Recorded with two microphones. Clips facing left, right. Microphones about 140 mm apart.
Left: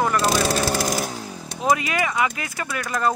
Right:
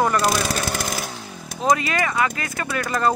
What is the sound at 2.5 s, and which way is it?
Speech, centre (ahead or behind).